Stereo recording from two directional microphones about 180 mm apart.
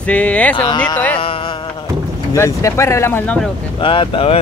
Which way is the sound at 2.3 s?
15° left (ahead or behind).